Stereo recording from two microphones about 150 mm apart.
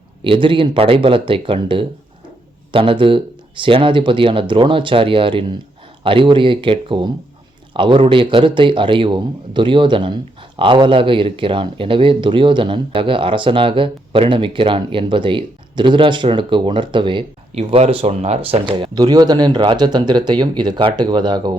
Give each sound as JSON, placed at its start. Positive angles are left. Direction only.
{"t": 0.3, "sound": "speech", "side_deg": -35}
{"t": 17.6, "sound": "speech", "side_deg": -45}